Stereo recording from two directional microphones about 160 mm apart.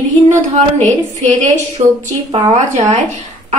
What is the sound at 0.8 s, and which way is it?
Speech, 45° right (ahead or behind).